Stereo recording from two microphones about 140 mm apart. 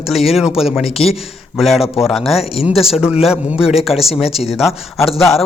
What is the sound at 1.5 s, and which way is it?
Speech, centre (ahead or behind).